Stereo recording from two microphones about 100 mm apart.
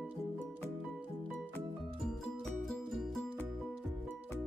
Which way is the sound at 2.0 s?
5° left (ahead or behind).